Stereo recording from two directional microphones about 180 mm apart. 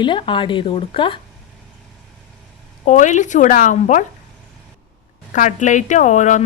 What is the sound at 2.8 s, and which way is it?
Speech, 45° left (ahead or behind).